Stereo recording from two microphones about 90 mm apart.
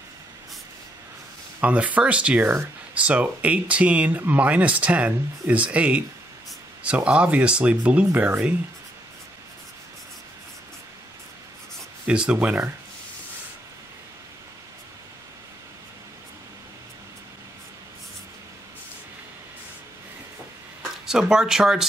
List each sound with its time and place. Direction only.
1.6 s speech: 15° right (ahead or behind)
12.1 s speech: 10° right (ahead or behind)
21.0 s speech: 5° right (ahead or behind)